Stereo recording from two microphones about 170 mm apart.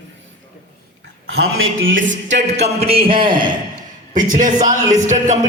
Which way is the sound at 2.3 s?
40° right (ahead or behind).